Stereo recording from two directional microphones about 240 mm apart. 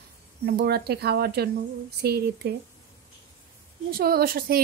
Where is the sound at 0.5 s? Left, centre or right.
Right.